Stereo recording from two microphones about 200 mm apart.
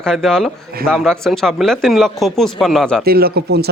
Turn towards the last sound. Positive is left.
turn(degrees=-50)  # may be behind; listen again after turning